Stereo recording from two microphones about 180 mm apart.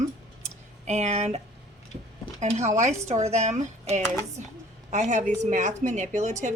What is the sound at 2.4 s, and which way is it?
A woman's voice, 40° right (ahead or behind).